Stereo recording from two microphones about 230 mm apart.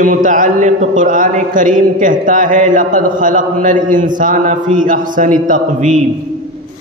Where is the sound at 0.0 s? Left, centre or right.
Right.